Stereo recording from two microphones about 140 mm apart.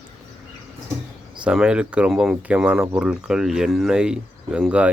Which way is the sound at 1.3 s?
5° right (ahead or behind).